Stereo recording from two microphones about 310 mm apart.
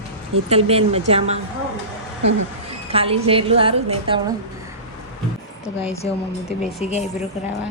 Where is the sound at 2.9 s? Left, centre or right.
Centre.